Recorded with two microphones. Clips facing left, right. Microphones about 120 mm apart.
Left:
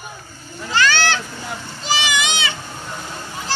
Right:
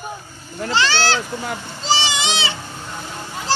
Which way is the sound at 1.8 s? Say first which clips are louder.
Right 1 dB; 30° right (ahead or behind).